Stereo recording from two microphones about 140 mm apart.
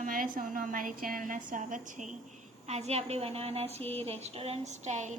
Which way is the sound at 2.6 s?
50° right (ahead or behind).